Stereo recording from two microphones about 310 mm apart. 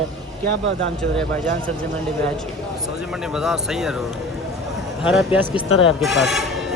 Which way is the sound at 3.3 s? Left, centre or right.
Centre.